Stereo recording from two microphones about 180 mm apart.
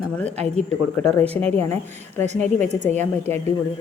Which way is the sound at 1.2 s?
35° right (ahead or behind).